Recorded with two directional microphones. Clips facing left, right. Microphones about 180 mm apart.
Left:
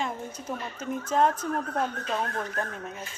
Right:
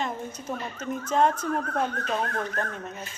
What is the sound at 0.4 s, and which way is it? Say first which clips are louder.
Speech: right 1 dB; 5° left (ahead or behind).